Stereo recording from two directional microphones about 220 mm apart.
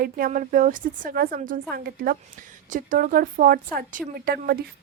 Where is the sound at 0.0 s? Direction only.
40° right (ahead or behind).